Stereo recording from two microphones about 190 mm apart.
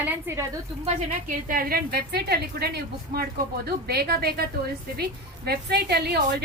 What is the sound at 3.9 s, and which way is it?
Speech, 55° right (ahead or behind).